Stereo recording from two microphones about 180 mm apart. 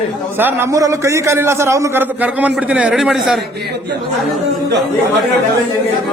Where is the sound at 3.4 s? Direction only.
70° right (ahead or behind).